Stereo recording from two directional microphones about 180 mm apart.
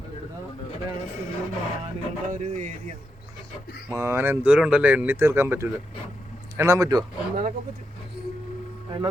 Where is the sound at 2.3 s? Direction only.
40° right (ahead or behind).